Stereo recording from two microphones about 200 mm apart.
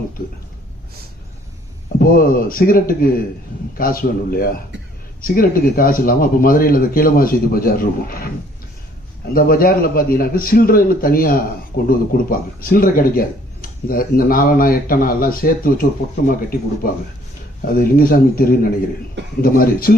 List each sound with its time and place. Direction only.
2.0 s speech: 45° left (ahead or behind)
9.3 s speech: 45° left (ahead or behind)